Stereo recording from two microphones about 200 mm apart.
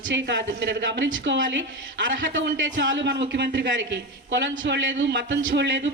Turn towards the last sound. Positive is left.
turn(degrees=-65)  # may be behind; listen again after turning